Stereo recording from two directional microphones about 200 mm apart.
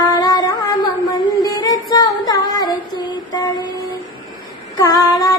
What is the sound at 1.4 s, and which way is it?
Music, 20° left (ahead or behind).